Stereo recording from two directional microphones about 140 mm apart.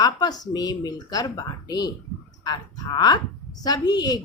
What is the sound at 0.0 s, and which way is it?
A woman's voice, 30° left (ahead or behind).